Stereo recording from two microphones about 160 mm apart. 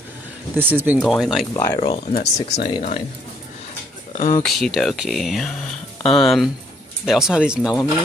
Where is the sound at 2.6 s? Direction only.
35° left (ahead or behind).